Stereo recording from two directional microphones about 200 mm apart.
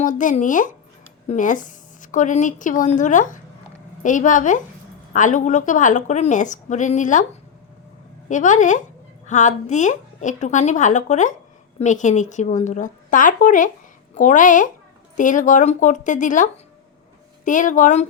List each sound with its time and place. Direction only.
0.0 s a woman's voice: 40° left (ahead or behind)
8.3 s a woman's voice: 40° left (ahead or behind)